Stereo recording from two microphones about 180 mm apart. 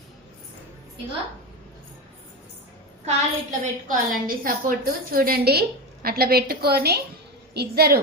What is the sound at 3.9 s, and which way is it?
A woman's voice, 50° right (ahead or behind).